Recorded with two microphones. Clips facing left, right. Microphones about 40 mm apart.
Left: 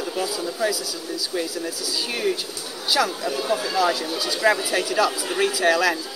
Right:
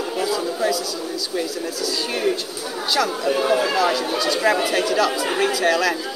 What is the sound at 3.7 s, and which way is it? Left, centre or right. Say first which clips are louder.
Speech: right 2 dB; centre.